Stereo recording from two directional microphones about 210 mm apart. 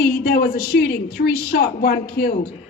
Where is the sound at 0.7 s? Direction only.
50° left (ahead or behind).